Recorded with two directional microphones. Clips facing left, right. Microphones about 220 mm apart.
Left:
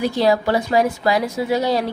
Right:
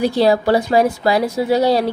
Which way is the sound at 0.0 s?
30° right (ahead or behind).